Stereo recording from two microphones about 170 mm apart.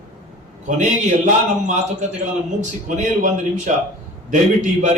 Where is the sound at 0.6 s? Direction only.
45° right (ahead or behind).